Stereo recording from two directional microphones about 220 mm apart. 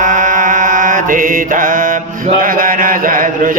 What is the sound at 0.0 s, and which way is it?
Mantra, 35° right (ahead or behind).